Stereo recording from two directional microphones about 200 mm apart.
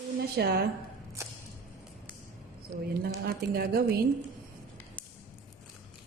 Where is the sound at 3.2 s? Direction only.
50° right (ahead or behind).